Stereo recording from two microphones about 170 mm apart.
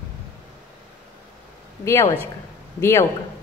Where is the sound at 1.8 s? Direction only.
15° left (ahead or behind).